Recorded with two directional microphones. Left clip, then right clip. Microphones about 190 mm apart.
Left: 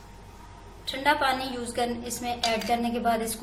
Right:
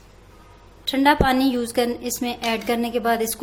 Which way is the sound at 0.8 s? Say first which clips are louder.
Right 6 dB; 55° right (ahead or behind).